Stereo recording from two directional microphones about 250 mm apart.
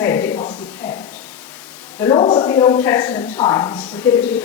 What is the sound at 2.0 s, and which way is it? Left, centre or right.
A woman's voice, centre.